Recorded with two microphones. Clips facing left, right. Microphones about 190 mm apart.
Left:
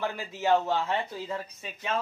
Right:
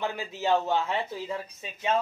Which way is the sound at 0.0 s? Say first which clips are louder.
Even; 15° right (ahead or behind).